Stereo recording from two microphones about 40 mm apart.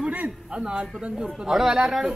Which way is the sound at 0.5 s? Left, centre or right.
Right.